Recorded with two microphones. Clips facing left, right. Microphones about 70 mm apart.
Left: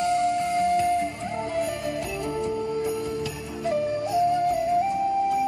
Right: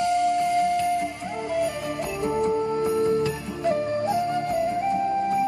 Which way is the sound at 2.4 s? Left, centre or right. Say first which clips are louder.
Right 4 dB; right.